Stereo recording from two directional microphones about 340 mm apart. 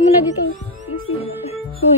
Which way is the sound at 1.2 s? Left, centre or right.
Centre.